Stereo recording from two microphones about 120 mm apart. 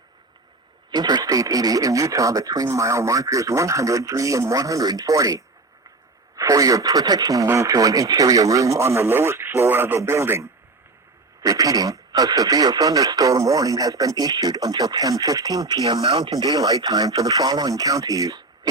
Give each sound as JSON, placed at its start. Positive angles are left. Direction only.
{"t": 0.9, "sound": "speech", "side_deg": -35}
{"t": 16.0, "sound": "speech", "side_deg": -50}